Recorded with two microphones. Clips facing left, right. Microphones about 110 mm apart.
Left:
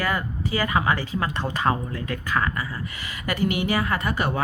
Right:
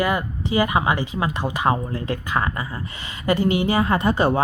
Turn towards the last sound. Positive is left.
turn(degrees=-30)  # may be behind; listen again after turning